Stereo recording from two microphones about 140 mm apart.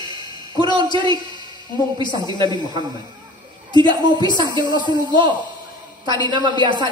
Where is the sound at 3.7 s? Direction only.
30° left (ahead or behind).